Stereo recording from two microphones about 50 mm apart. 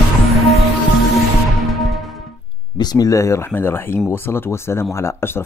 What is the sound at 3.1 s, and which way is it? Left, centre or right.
Speech, left.